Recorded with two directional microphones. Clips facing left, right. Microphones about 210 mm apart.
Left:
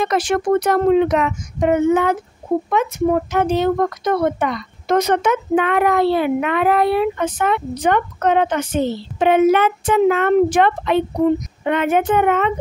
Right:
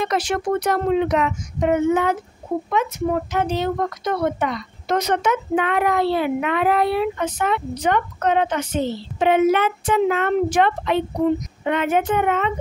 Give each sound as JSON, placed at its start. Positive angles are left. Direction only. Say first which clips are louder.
{"t": 0.0, "sound": "speech", "louder": "left 4 dB", "side_deg": 50}
{"t": 3.3, "sound": "speech", "louder": "left 5 dB", "side_deg": 50}